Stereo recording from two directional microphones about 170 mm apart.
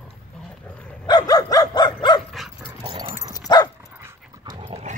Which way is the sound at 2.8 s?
30° right (ahead or behind).